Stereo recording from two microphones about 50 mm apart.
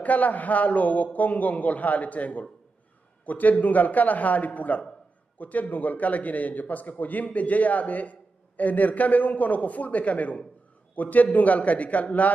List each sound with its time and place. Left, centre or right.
0.0 s a man's voice: left